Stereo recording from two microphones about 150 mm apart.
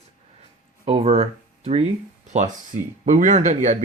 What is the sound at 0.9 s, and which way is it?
Speech, 45° right (ahead or behind).